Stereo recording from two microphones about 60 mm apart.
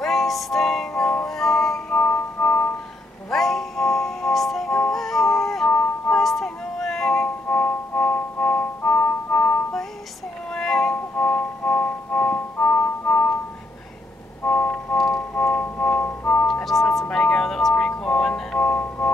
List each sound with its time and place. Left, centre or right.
0.0 s music: centre
1.9 s music: left
3.3 s music: centre
5.7 s music: left
6.1 s music: centre
7.5 s music: left
10.5 s music: centre
11.1 s music: left
14.4 s music: left
14.9 s music: centre
15.3 s music: left
16.7 s music: centre; by 19.1 s left